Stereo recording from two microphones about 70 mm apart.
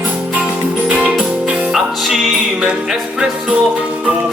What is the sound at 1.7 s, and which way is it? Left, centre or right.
Music, centre.